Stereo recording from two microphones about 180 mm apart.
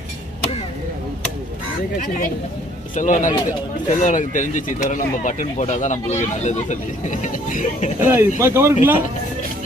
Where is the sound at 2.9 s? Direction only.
45° left (ahead or behind).